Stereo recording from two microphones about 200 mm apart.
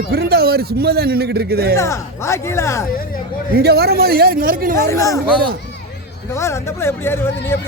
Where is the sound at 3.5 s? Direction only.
55° right (ahead or behind).